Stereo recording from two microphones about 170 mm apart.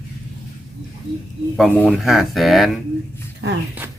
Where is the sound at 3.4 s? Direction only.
90° right.